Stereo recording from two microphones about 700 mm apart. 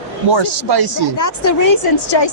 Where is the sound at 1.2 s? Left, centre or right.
Left.